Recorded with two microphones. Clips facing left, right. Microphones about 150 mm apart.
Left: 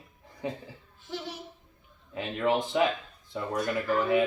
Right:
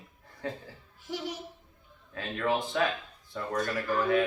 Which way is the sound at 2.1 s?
20° left (ahead or behind).